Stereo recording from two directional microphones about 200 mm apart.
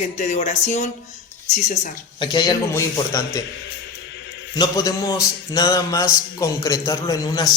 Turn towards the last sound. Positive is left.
turn(degrees=15)  # may be behind; listen again after turning